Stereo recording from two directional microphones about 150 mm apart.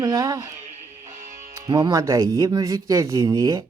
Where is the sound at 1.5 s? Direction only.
25° right (ahead or behind).